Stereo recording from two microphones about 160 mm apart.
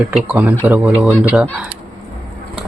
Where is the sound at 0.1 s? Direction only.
5° right (ahead or behind).